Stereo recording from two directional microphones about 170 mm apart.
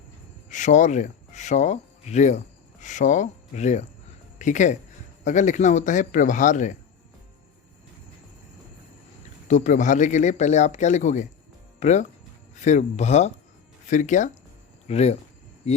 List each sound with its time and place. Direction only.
0.5 s speech: 45° left (ahead or behind)
9.5 s speech: 45° left (ahead or behind)